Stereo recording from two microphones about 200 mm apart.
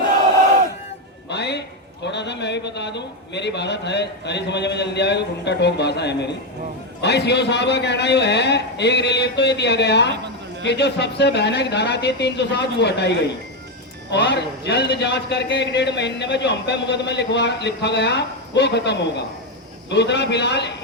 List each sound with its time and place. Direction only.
1.3 s music: 60° left (ahead or behind)
2.0 s a man's voice: 60° left (ahead or behind)